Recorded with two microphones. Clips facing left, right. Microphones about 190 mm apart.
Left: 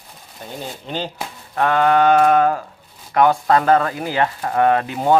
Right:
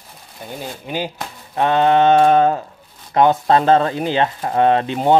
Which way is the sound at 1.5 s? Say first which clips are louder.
Right 1 dB; 20° right (ahead or behind).